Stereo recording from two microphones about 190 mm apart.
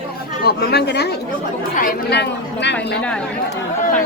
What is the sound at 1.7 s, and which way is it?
Speech, 45° left (ahead or behind).